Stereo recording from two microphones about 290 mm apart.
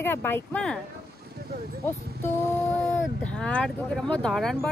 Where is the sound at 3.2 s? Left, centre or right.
Centre.